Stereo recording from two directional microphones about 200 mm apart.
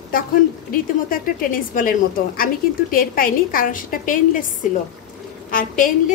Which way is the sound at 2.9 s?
45° left (ahead or behind).